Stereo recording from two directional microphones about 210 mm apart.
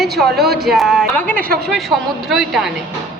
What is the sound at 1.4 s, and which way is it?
Speech, 45° right (ahead or behind).